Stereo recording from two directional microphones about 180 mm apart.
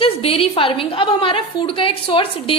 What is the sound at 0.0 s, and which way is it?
A woman's voice, 30° left (ahead or behind).